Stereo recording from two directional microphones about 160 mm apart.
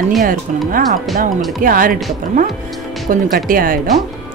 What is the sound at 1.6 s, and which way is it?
Speech, 60° right (ahead or behind).